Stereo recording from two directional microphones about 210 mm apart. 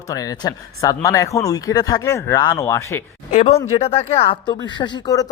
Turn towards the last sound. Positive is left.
turn(degrees=20)  # may be behind; listen again after turning